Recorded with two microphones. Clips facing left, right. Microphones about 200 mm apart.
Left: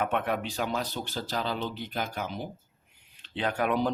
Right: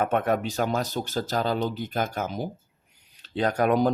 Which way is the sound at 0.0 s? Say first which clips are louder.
Right 5 dB; 45° right (ahead or behind).